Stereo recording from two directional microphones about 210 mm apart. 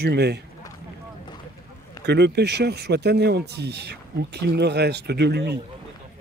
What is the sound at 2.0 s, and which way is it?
Speech, 50° right (ahead or behind).